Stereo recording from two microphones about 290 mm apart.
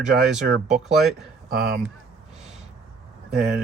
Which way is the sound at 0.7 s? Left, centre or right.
Centre.